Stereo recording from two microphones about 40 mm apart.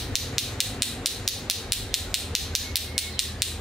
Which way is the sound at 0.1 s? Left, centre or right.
Centre.